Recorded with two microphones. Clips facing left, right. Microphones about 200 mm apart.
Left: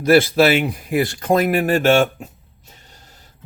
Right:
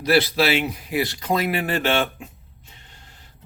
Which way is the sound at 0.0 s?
50° left (ahead or behind).